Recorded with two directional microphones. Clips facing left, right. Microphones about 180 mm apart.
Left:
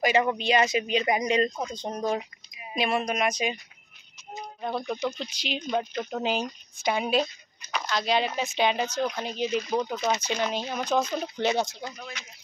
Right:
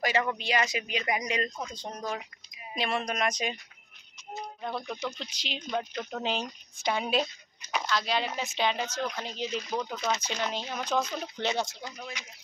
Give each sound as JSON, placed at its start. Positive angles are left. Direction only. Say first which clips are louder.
{"t": 0.0, "sound": "speech", "louder": "left 5 dB", "side_deg": 20}
{"t": 2.7, "sound": "speech", "louder": "left 4 dB", "side_deg": 10}
{"t": 5.1, "sound": "speech", "louder": "left 6 dB", "side_deg": 10}
{"t": 7.9, "sound": "speech", "louder": "left 5 dB", "side_deg": 20}
{"t": 12.0, "sound": "speech", "louder": "even", "side_deg": -15}